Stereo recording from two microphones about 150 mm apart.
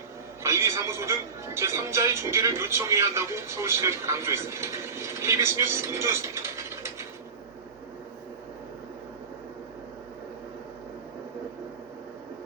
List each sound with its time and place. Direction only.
0.4 s speech: 20° right (ahead or behind)